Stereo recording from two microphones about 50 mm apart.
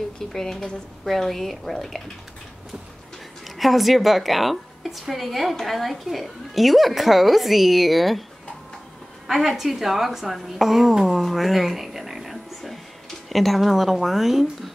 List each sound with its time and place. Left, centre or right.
0.3 s a woman's voice: centre
3.5 s a woman's voice: centre
9.3 s a woman's voice: centre